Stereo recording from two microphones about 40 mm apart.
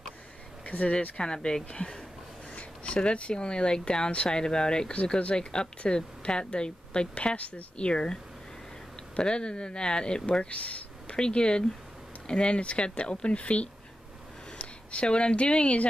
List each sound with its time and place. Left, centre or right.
0.7 s speech: left
1.1 s speech: left
4.4 s speech: centre; by 7.6 s left
7.7 s speech: left
10.5 s a sound: left
11.1 s speech: left